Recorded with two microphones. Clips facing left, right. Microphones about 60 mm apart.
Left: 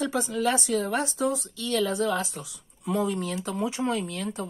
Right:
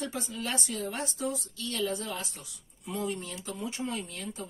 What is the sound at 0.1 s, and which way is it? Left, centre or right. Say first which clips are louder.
Speech: left 9 dB; left.